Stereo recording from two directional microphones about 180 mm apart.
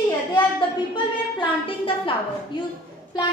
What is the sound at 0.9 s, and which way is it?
A woman's voice, 30° left (ahead or behind).